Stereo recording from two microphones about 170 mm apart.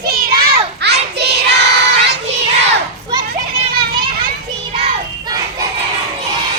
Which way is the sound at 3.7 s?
60° right (ahead or behind).